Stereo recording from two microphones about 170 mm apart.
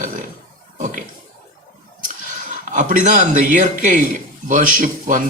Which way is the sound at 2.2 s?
50° right (ahead or behind).